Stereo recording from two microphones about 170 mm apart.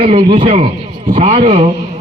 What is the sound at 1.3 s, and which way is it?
Speech, 30° right (ahead or behind).